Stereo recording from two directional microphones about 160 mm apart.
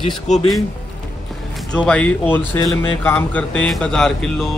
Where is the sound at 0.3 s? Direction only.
45° left (ahead or behind).